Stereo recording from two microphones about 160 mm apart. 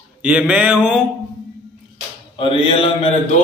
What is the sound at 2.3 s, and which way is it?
Music, 35° left (ahead or behind).